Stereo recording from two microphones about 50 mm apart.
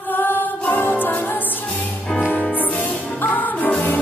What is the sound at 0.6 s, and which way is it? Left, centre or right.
Music, left.